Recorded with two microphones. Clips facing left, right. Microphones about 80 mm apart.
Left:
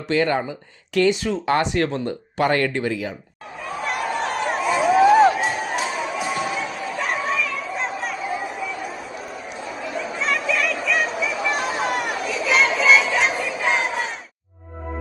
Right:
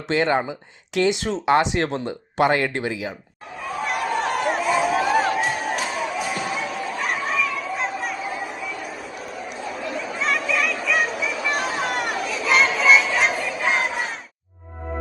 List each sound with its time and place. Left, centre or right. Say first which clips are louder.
0.1 s speech: even; right
3.8 s a sound: right 1 dB; centre
9.6 s chatter: left 1 dB; centre